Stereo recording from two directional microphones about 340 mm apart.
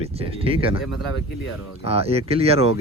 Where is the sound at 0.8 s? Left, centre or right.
Centre.